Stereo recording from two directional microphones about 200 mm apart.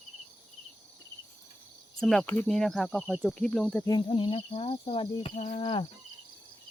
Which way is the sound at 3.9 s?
25° left (ahead or behind).